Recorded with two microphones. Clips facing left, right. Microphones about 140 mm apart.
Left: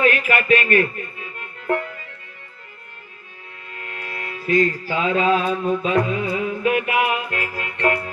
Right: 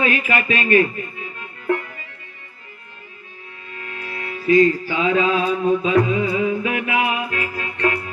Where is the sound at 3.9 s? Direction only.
50° left (ahead or behind).